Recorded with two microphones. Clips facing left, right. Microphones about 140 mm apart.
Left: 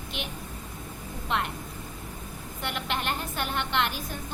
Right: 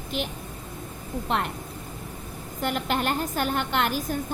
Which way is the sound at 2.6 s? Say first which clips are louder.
Right 5 dB; 40° right (ahead or behind).